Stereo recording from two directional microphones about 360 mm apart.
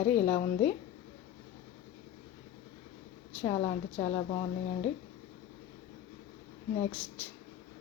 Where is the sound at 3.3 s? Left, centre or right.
Centre.